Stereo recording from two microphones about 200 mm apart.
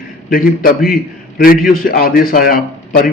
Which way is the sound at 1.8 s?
45° left (ahead or behind).